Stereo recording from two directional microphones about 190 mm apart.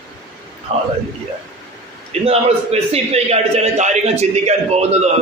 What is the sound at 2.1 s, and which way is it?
A man's voice, 35° right (ahead or behind).